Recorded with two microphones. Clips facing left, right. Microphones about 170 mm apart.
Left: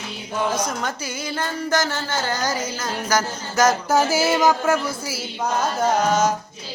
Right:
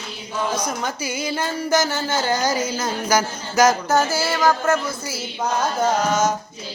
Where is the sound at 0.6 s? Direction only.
5° right (ahead or behind).